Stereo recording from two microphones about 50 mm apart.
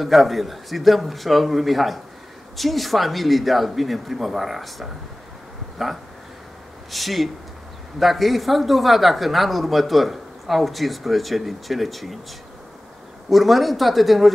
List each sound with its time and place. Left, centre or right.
0.0 s speech: centre
6.9 s speech: centre
13.3 s speech: centre